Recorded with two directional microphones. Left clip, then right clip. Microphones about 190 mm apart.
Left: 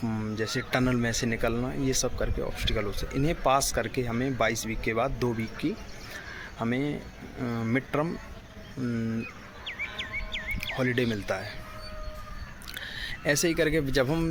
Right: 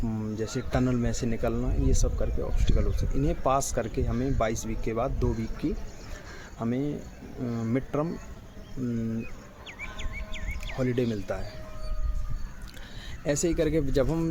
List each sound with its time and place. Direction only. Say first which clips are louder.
0.0 s speech: left 1 dB; 5° right (ahead or behind)
9.6 s music: left 6 dB; 45° right (ahead or behind)
10.6 s speech: even; 5° right (ahead or behind)
12.7 s speech: left 11 dB; centre (ahead or behind)